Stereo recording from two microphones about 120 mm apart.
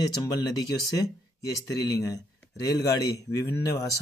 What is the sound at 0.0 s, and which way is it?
Speech, 35° left (ahead or behind).